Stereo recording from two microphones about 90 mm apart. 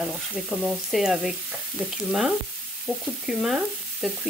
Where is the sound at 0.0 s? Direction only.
5° right (ahead or behind).